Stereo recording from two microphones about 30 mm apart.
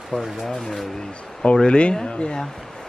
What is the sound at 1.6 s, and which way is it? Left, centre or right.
Speech, left.